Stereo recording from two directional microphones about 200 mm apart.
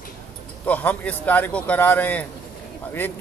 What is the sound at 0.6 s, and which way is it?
A man's voice, 10° left (ahead or behind).